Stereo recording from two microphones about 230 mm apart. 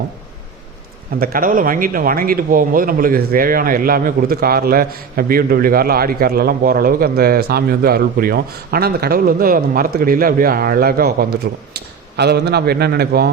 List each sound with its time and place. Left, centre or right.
1.2 s a man's voice: right